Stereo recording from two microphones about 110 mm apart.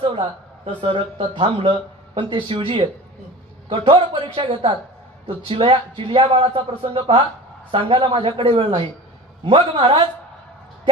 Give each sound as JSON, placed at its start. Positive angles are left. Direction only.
{"t": 0.1, "sound": "a man's voice", "side_deg": -50}